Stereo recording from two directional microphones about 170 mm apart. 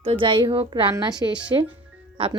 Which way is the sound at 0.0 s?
30° right (ahead or behind).